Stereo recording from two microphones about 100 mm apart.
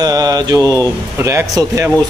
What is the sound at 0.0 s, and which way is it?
Mantra, 40° right (ahead or behind).